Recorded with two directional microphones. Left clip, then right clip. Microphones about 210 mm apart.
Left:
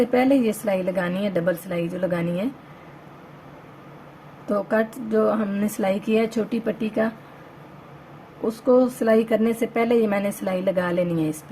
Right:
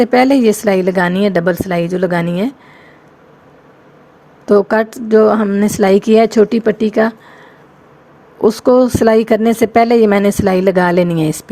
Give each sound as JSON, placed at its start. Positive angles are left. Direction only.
{"t": 0.0, "sound": "speech", "side_deg": -45}
{"t": 4.4, "sound": "speech", "side_deg": -45}
{"t": 8.4, "sound": "speech", "side_deg": -40}